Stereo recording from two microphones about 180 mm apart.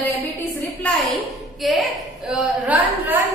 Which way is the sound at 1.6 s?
Centre (ahead or behind).